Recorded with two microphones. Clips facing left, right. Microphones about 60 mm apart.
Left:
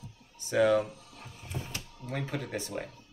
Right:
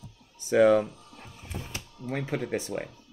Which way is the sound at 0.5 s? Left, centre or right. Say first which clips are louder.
Right 5 dB; right.